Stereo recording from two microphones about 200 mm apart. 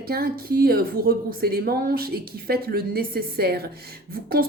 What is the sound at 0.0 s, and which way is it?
Speech, 50° right (ahead or behind).